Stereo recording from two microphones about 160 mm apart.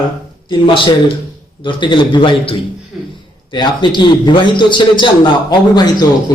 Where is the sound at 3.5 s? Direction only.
30° left (ahead or behind).